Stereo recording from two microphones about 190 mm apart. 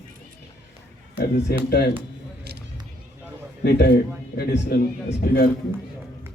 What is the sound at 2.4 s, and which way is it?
Vehicle, 60° right (ahead or behind).